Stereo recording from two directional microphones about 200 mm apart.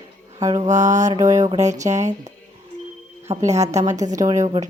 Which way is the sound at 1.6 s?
35° right (ahead or behind).